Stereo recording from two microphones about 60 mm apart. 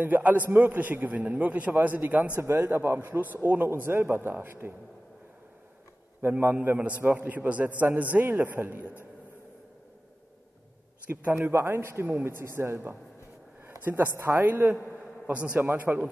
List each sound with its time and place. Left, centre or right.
0.0 s a man's voice: right
2.4 s a man's voice: right
6.3 s a man's voice: right
11.1 s a man's voice: right
11.5 s a man's voice: right
15.3 s a man's voice: right